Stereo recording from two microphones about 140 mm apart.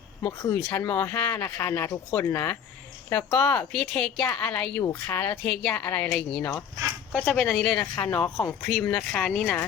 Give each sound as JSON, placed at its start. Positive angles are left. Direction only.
{"t": 0.3, "sound": "speech", "side_deg": 15}